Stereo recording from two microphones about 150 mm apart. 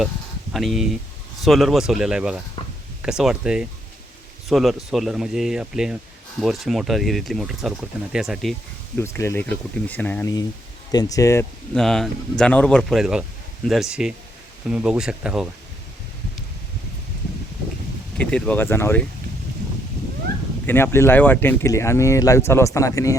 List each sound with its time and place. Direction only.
0.5 s speech: centre (ahead or behind)
9.0 s speech: 15° left (ahead or behind)
10.9 s speech: 20° left (ahead or behind)
11.7 s speech: centre (ahead or behind)
18.2 s speech: 10° left (ahead or behind)
20.7 s speech: 15° left (ahead or behind)